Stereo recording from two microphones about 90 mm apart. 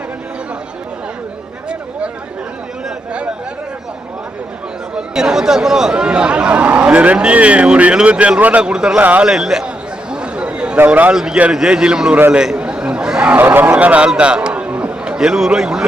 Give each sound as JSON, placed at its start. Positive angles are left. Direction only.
{"t": 4.9, "sound": "speech", "side_deg": -5}
{"t": 9.3, "sound": "a man's voice", "side_deg": -5}
{"t": 10.1, "sound": "chatter", "side_deg": -10}
{"t": 10.8, "sound": "speech", "side_deg": -20}
{"t": 11.1, "sound": "a man's voice", "side_deg": -5}